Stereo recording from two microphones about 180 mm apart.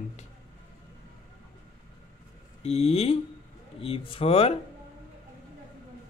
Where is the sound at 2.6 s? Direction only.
35° left (ahead or behind).